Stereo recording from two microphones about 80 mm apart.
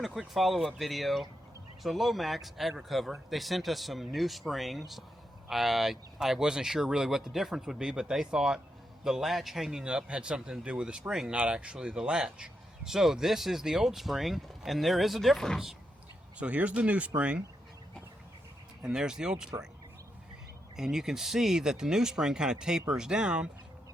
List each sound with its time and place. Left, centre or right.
0.0 s speech: centre
16.4 s speech: centre
18.8 s speech: centre
20.7 s speech: centre